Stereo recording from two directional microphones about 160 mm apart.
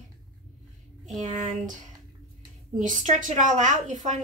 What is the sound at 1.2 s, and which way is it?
Speech, 50° right (ahead or behind).